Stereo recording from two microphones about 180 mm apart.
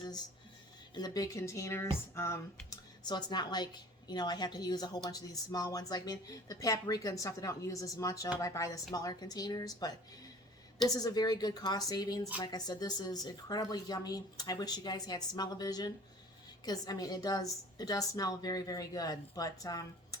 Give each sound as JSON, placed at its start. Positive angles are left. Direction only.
{"t": 0.9, "sound": "speech", "side_deg": 20}